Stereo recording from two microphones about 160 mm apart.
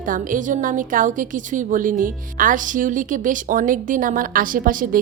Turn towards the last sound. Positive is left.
turn(degrees=-60)  # may be behind; listen again after turning